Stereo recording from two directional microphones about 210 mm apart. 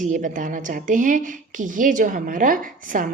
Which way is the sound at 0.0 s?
35° right (ahead or behind).